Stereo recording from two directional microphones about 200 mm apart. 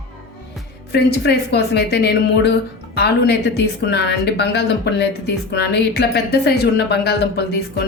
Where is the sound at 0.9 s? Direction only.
55° left (ahead or behind).